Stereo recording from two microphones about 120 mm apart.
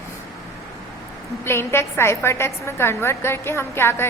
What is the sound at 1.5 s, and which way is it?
A woman's voice, 20° left (ahead or behind).